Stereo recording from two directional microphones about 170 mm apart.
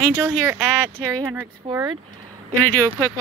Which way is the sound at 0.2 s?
15° right (ahead or behind).